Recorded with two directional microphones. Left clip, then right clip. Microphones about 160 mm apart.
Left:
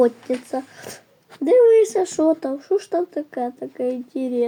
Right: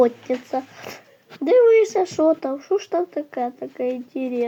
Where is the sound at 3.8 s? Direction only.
25° right (ahead or behind).